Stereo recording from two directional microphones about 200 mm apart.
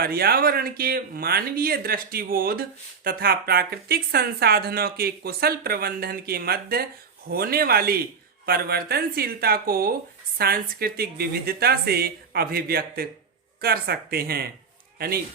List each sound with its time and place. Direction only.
0.0 s speech: 50° right (ahead or behind)